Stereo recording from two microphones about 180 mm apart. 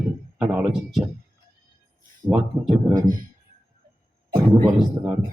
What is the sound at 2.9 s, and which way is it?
Speech, 50° right (ahead or behind).